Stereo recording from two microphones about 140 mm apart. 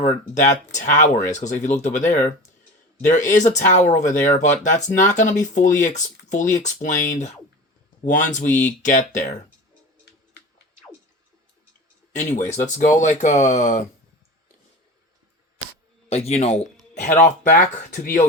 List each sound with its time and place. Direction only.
0.3 s speech: 60° left (ahead or behind)
12.1 s speech: 60° left (ahead or behind)
16.0 s a man's voice: 50° left (ahead or behind); by 18.3 s 70° left (ahead or behind)